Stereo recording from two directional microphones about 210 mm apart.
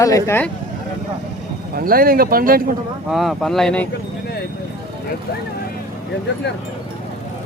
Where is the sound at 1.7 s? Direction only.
45° right (ahead or behind).